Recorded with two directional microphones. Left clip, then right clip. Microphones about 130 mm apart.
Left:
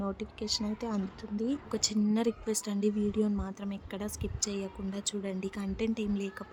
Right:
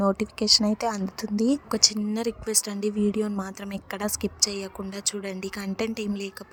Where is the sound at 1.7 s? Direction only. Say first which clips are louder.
Right 8 dB; 40° right (ahead or behind).